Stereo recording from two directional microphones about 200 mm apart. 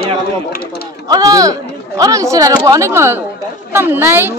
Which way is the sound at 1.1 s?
20° right (ahead or behind).